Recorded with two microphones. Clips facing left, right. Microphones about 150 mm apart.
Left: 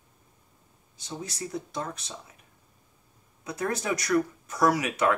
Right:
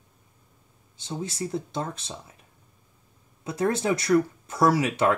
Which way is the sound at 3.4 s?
25° right (ahead or behind).